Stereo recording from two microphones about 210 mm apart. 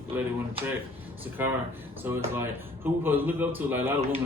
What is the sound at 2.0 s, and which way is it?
Speech, 10° right (ahead or behind).